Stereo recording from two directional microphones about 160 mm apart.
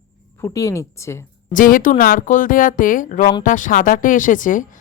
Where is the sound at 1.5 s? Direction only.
60° left (ahead or behind).